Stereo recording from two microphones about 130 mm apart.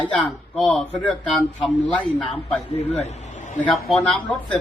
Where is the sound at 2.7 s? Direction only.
55° left (ahead or behind).